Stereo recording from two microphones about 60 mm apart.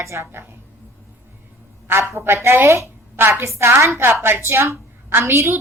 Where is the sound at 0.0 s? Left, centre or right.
Right.